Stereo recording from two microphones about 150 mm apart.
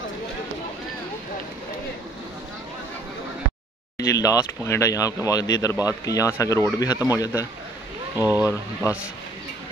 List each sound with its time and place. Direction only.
4.0 s speech: 20° left (ahead or behind)
8.2 s speech: 15° right (ahead or behind)